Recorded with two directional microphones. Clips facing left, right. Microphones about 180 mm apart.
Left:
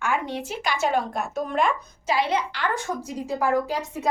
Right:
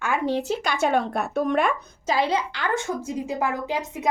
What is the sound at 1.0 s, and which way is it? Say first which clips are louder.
Speech: right 3 dB; 60° right (ahead or behind).